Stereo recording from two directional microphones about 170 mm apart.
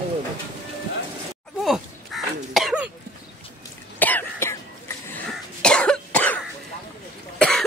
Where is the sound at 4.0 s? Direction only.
10° left (ahead or behind).